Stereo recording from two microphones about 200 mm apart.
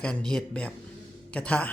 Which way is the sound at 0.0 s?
5° left (ahead or behind).